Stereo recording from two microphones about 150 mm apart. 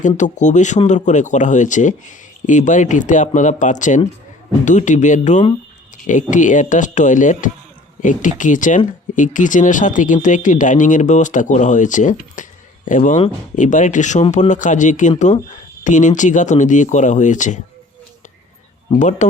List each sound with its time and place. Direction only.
0.2 s speech: 55° left (ahead or behind)
18.9 s speech: 50° left (ahead or behind)